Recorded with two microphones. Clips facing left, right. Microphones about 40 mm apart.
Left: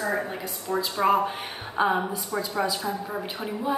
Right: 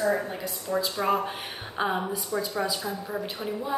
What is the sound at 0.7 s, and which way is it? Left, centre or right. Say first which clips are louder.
Speech: even; centre.